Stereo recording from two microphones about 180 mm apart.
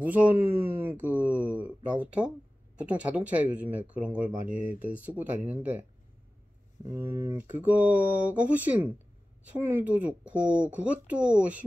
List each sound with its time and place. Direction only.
0.0 s speech: 10° right (ahead or behind)
6.9 s speech: 15° right (ahead or behind)